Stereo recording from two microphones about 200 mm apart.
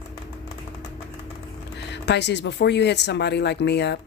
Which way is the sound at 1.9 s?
60° left (ahead or behind).